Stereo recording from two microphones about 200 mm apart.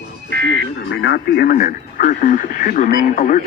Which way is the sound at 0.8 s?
55° left (ahead or behind).